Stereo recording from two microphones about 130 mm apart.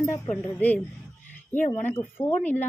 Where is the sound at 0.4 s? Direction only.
15° left (ahead or behind).